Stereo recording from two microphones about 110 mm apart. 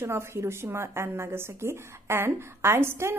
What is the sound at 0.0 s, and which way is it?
A woman's voice, 25° right (ahead or behind).